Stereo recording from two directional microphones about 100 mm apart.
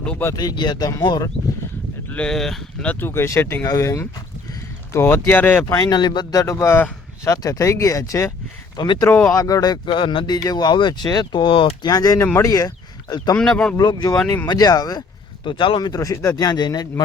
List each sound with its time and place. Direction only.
0.3 s speech: 45° left (ahead or behind)
2.1 s speech: 5° left (ahead or behind)
2.9 s speech: 20° left (ahead or behind)
5.6 s speech: 40° left (ahead or behind)
6.4 s speech: 30° left (ahead or behind)
9.0 s speech: 25° left (ahead or behind)
9.4 s speech: 40° left (ahead or behind)
9.9 s speech: 60° left (ahead or behind)
11.9 s speech: 40° left (ahead or behind)
13.3 s speech: 5° left (ahead or behind)
13.7 s speech: 40° left (ahead or behind)
15.4 s speech: 55° left (ahead or behind)
15.9 s speech: 35° left (ahead or behind)